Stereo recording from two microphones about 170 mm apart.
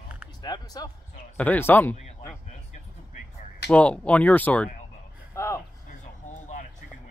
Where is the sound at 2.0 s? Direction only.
40° left (ahead or behind).